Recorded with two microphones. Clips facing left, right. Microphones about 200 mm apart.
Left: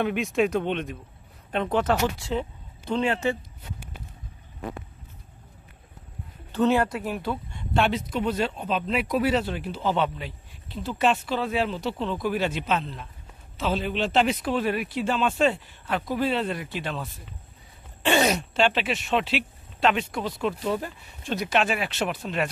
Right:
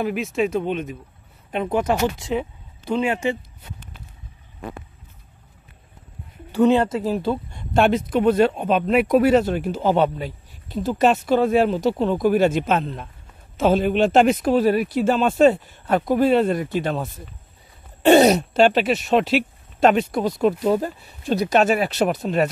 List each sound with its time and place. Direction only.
0.0 s speech: centre (ahead or behind)
6.5 s speech: 15° right (ahead or behind)
7.5 s speech: 45° right (ahead or behind)